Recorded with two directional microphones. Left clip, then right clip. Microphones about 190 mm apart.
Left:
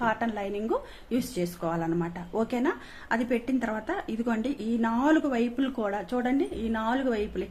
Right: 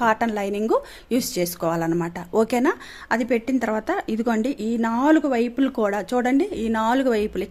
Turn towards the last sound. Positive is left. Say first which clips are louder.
# right 7 dB
turn(degrees=-60)  # may be behind; listen again after turning